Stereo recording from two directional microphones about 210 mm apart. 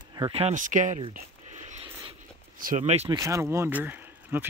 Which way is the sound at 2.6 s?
35° right (ahead or behind).